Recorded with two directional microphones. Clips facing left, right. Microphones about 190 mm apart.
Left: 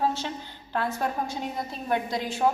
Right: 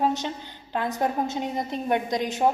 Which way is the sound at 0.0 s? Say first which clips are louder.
Right 3 dB; 20° right (ahead or behind).